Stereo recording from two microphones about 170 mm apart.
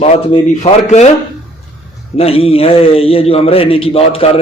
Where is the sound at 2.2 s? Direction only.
35° left (ahead or behind).